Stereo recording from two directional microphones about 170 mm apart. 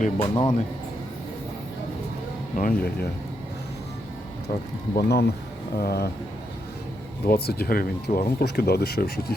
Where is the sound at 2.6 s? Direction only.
60° left (ahead or behind).